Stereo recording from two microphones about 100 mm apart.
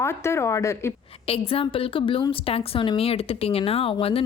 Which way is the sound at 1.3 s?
70° left (ahead or behind).